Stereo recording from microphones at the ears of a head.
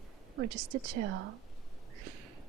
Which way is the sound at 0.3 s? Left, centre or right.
Right.